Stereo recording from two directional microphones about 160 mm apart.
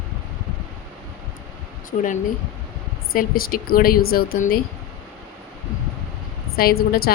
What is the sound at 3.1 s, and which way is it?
A woman's voice, 65° left (ahead or behind).